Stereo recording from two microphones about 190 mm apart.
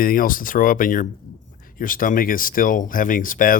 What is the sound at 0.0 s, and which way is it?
Speech, 50° left (ahead or behind).